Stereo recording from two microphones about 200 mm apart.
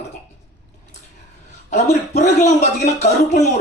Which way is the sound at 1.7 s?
35° left (ahead or behind).